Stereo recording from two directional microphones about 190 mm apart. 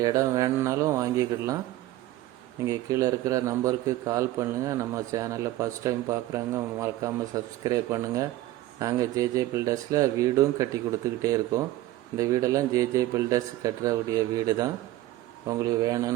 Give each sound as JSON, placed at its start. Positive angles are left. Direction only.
{"t": 0.0, "sound": "a man's voice", "side_deg": -20}
{"t": 2.6, "sound": "a man's voice", "side_deg": -15}